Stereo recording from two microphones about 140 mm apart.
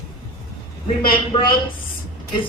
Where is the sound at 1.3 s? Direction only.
40° left (ahead or behind).